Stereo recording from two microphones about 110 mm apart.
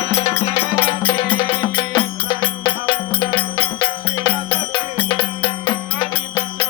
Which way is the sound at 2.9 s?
40° left (ahead or behind).